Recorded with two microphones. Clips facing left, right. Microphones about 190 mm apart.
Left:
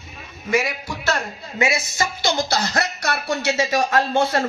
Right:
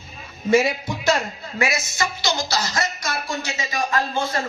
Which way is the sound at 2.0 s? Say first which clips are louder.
Left 2 dB; 55° left (ahead or behind).